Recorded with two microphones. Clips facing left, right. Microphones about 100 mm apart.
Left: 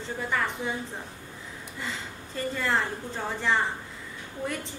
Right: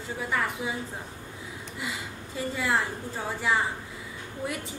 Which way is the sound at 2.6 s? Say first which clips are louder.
Even; 10° right (ahead or behind).